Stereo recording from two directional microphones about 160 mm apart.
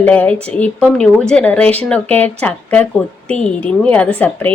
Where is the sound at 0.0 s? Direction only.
10° left (ahead or behind).